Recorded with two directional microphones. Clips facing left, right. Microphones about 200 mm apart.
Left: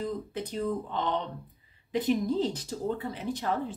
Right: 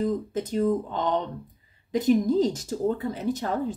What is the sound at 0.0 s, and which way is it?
A woman's voice, 45° right (ahead or behind).